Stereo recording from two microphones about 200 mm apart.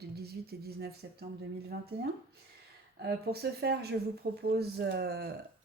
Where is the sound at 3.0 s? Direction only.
55° right (ahead or behind).